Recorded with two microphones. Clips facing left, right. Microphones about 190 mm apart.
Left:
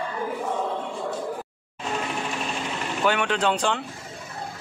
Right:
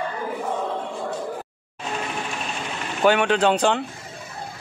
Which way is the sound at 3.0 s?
65° right (ahead or behind).